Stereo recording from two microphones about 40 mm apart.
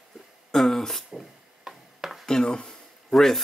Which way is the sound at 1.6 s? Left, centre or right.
Centre.